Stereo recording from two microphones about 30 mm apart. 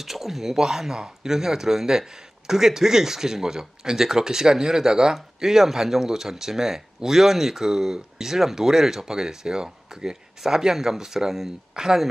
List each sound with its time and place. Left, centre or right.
0.0 s speech: centre